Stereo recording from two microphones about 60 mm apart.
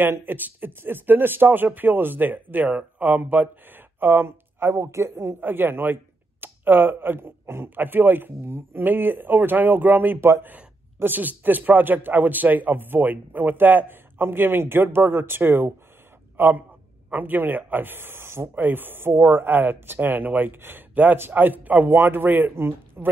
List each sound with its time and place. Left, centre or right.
0.2 s a man's voice: right
18.5 s a woman's voice: right